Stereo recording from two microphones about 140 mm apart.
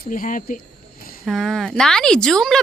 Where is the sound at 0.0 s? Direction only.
75° left (ahead or behind).